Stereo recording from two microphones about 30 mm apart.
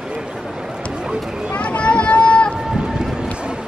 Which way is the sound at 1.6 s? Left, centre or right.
Left.